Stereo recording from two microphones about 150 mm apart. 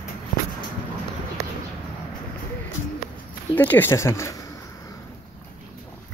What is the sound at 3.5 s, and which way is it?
Speech, 10° left (ahead or behind).